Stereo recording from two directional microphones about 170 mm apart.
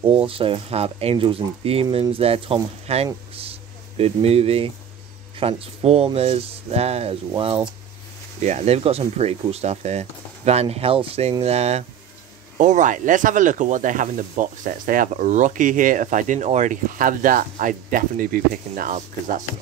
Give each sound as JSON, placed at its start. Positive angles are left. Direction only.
{"t": 0.0, "sound": "speech", "side_deg": -30}
{"t": 8.4, "sound": "speech", "side_deg": -45}